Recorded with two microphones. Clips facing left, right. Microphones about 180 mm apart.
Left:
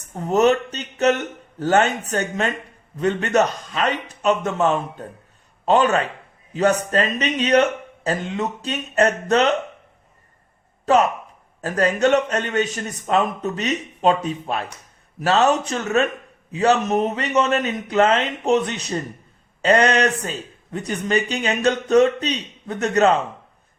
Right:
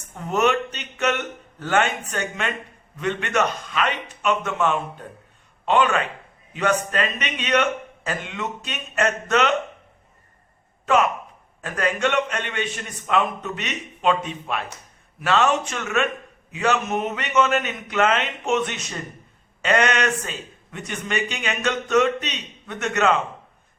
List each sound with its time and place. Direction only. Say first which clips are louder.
0.1 s speech: left 4 dB; 35° left (ahead or behind)
10.8 s speech: left 3 dB; 35° left (ahead or behind)